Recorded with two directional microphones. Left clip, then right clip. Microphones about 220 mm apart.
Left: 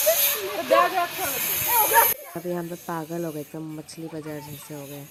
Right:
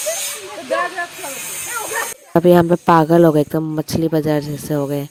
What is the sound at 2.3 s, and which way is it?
Speech, 45° right (ahead or behind).